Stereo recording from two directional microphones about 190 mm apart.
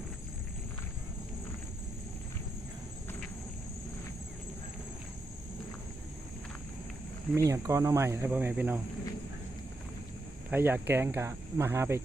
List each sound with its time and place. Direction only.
7.3 s speech: 15° right (ahead or behind)
10.5 s speech: 10° right (ahead or behind)